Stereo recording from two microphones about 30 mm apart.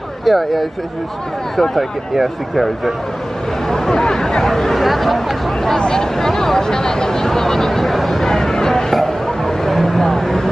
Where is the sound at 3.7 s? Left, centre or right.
Centre.